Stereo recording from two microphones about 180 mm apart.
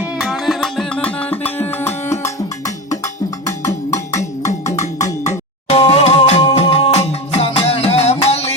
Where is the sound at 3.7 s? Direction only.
15° left (ahead or behind).